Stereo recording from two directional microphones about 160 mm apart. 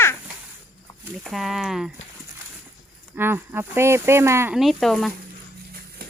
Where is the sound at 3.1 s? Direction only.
15° right (ahead or behind).